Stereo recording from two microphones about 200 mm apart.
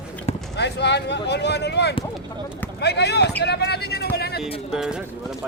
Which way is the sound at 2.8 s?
55° left (ahead or behind).